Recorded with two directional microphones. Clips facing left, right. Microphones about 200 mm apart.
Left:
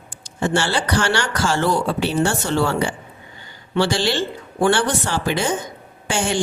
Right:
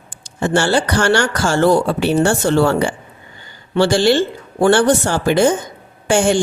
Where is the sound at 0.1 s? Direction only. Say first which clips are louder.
Right 3 dB; 50° right (ahead or behind).